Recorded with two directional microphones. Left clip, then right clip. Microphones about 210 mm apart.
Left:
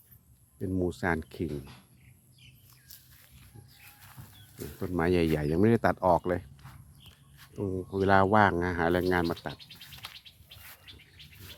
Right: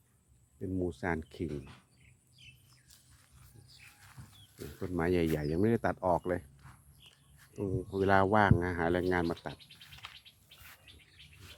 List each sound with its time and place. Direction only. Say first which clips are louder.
0.6 s speech: left 5 dB; 20° left (ahead or behind)
4.0 s speech: left 3 dB; 10° left (ahead or behind)
7.0 s a sound: left 4 dB; 15° left (ahead or behind)
7.5 s speech: left 3 dB; 5° left (ahead or behind)
9.8 s a sound: left 3 dB; 15° left (ahead or behind)
10.9 s bird: left 6 dB; 50° left (ahead or behind)